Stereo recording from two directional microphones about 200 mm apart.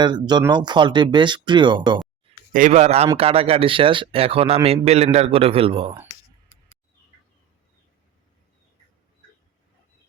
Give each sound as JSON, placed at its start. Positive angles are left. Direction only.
{"t": 0.0, "sound": "a man's voice", "side_deg": -20}
{"t": 2.5, "sound": "a man's voice", "side_deg": -40}